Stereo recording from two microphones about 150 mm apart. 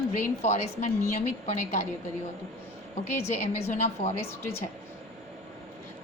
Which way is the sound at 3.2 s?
45° left (ahead or behind).